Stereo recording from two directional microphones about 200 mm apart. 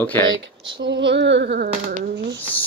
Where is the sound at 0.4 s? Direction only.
60° right (ahead or behind).